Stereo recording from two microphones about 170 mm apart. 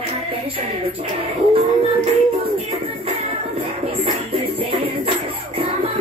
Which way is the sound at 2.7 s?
35° right (ahead or behind).